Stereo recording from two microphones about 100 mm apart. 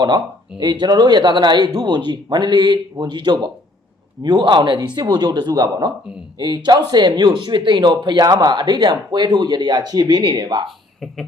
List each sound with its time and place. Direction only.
0.6 s speech: 45° right (ahead or behind)